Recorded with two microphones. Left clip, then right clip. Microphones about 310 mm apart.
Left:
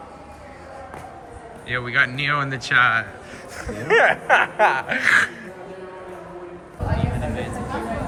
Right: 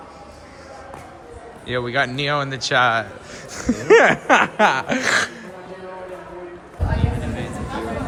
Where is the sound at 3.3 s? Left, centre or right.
Right; by 5.4 s centre.